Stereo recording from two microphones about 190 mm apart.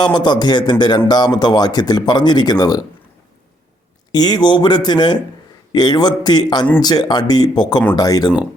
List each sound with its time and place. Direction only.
0.0 s speech: 20° left (ahead or behind)
4.1 s speech: 20° left (ahead or behind)